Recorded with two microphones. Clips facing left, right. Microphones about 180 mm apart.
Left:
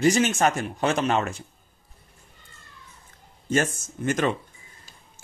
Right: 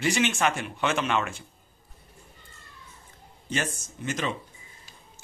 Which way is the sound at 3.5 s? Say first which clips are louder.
Left 7 dB; 45° left (ahead or behind).